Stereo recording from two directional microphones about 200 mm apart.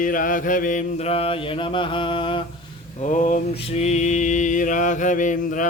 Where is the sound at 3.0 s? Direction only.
40° left (ahead or behind).